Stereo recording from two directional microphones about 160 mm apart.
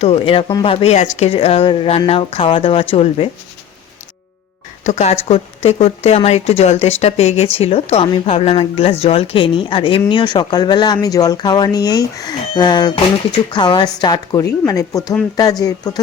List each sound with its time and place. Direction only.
0.0 s speech: 35° left (ahead or behind)
4.8 s speech: 45° left (ahead or behind); by 16.0 s 25° left (ahead or behind)